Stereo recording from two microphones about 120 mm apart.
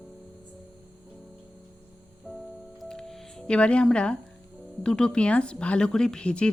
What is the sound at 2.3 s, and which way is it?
Music, 5° right (ahead or behind).